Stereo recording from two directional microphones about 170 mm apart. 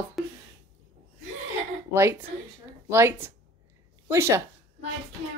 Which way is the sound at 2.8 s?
15° right (ahead or behind).